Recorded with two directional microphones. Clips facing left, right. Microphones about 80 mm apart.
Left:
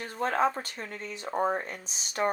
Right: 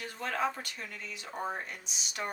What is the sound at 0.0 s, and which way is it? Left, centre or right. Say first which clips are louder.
Speech: left 6 dB; left.